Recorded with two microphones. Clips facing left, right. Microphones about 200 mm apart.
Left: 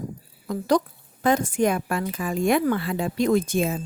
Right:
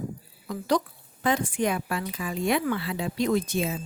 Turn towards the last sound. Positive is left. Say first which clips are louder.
# left 4 dB
turn(degrees=50)  # may be behind; listen again after turning